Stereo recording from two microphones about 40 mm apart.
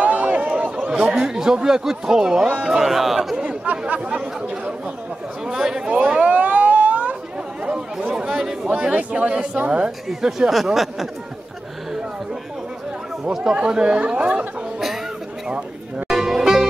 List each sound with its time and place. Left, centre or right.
0.0 s run: right
1.3 s speech: centre
3.9 s speech: right
5.4 s speech: centre
5.9 s speech: right
6.3 s a sound: right
7.6 s chatter: right
8.4 s speech: centre
9.8 s speech: centre
13.6 s speech: right
16.1 s music: centre